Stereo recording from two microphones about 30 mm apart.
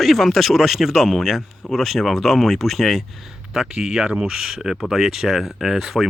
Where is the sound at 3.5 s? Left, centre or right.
Right.